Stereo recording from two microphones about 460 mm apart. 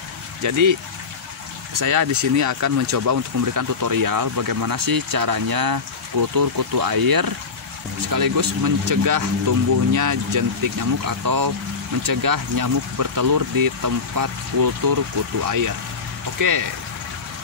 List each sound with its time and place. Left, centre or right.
0.4 s speech: right